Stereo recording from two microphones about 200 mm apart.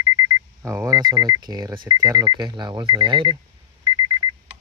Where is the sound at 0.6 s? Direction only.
15° right (ahead or behind).